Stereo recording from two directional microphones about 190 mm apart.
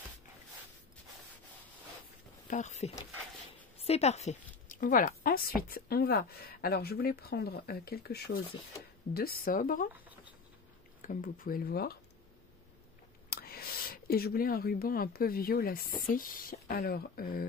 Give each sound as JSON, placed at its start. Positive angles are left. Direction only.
{"t": 2.5, "sound": "speech", "side_deg": 40}
{"t": 11.0, "sound": "speech", "side_deg": 45}
{"t": 13.3, "sound": "a woman's voice", "side_deg": 55}